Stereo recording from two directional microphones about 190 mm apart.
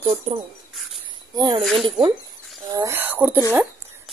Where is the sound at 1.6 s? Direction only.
Centre (ahead or behind).